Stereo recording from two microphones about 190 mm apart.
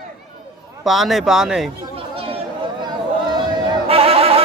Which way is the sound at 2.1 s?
30° right (ahead or behind).